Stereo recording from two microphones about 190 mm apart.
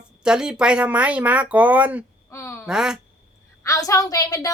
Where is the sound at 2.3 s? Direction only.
15° left (ahead or behind).